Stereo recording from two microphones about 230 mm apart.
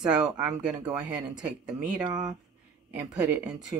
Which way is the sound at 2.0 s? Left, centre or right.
Centre.